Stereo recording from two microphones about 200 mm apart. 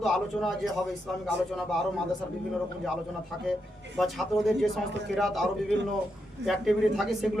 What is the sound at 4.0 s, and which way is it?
A man's voice, centre (ahead or behind).